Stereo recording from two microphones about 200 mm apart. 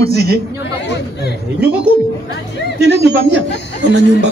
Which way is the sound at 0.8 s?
55° left (ahead or behind).